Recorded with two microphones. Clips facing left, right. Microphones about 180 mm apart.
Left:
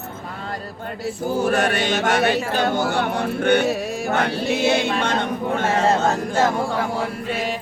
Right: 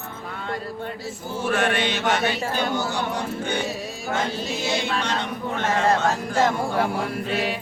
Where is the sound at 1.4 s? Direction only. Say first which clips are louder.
Left 1 dB; 40° left (ahead or behind).